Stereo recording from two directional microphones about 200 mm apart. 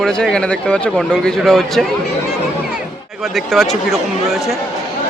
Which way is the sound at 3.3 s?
Centre (ahead or behind).